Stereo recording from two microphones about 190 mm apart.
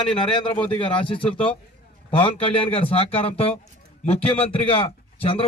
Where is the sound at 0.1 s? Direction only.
25° left (ahead or behind).